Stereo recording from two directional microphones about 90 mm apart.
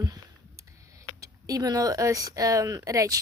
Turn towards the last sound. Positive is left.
turn(degrees=-40)  # may be behind; listen again after turning